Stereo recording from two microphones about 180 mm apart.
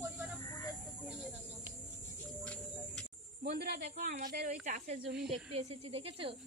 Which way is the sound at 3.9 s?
45° right (ahead or behind).